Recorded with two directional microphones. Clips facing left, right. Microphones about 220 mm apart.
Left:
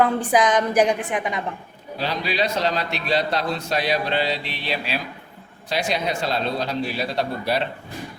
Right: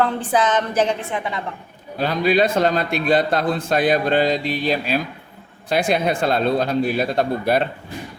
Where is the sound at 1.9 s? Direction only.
50° right (ahead or behind).